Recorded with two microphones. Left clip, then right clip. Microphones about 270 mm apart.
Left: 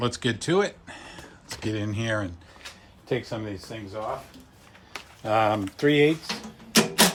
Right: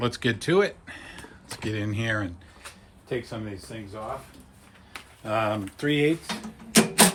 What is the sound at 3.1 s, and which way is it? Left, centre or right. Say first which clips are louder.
Speech: left 3 dB; left.